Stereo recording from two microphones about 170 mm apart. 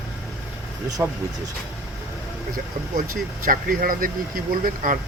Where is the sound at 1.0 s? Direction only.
15° right (ahead or behind).